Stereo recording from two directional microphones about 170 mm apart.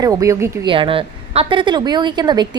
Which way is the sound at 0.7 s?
30° right (ahead or behind).